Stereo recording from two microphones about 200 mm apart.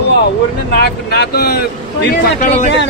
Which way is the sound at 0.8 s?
55° left (ahead or behind).